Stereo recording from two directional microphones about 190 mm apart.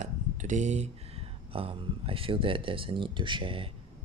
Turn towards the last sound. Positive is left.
turn(degrees=-25)  # may be behind; listen again after turning